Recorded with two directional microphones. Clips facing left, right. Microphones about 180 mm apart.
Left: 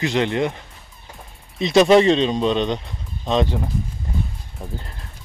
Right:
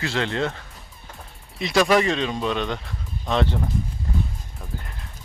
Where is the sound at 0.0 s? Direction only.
20° left (ahead or behind).